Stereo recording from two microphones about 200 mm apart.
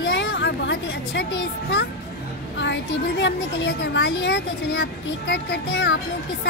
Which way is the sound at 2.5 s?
60° left (ahead or behind).